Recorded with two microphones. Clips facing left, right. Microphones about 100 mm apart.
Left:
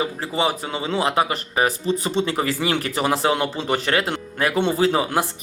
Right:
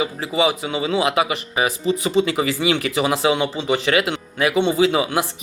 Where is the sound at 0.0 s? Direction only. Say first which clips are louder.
Right 3 dB; 40° left (ahead or behind).